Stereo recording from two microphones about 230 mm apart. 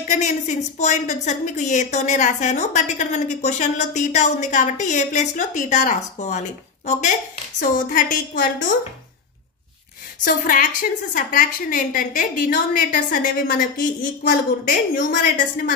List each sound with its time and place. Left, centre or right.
0.0 s a woman's voice: left
10.2 s a woman's voice: left